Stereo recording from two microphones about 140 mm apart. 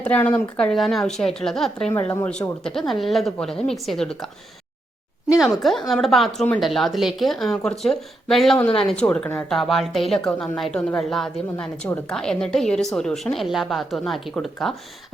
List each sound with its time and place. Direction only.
0.0 s speech: 10° left (ahead or behind)
1.9 s a woman's voice: 20° left (ahead or behind)
2.6 s speech: centre (ahead or behind)
5.3 s a woman's voice: centre (ahead or behind)